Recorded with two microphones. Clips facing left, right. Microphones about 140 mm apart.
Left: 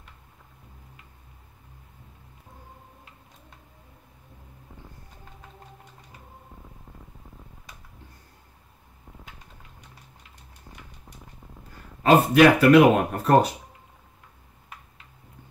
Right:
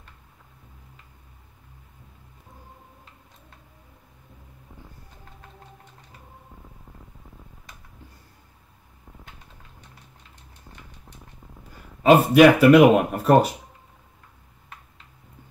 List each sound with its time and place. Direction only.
12.0 s speech: 10° right (ahead or behind)